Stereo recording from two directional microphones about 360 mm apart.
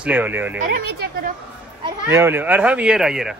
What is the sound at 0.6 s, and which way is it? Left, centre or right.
Speech, right.